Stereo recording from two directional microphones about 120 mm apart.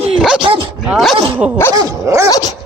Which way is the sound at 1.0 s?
Centre (ahead or behind).